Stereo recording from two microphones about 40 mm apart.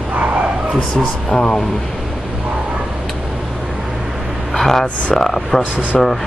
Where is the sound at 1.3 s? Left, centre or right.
Left.